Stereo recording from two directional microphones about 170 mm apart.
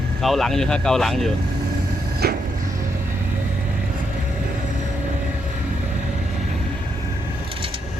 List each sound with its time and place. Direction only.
0.2 s speech: centre (ahead or behind)
2.2 s vehicle: 65° right (ahead or behind)